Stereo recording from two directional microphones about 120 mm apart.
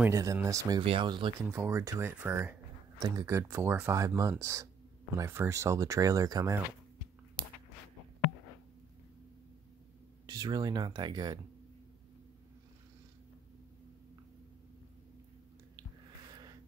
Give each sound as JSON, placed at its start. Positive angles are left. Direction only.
{"t": 0.0, "sound": "speech", "side_deg": -25}
{"t": 0.7, "sound": "speech", "side_deg": -45}
{"t": 1.5, "sound": "speech", "side_deg": -20}
{"t": 3.0, "sound": "speech", "side_deg": -30}
{"t": 10.2, "sound": "speech", "side_deg": -35}